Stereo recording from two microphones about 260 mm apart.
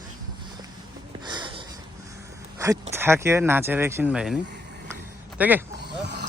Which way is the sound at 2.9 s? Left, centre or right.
Centre.